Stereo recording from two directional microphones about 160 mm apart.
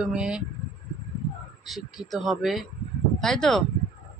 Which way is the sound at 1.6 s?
Centre (ahead or behind).